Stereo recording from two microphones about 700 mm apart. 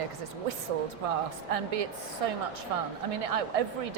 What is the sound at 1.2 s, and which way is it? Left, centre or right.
A woman's voice, right.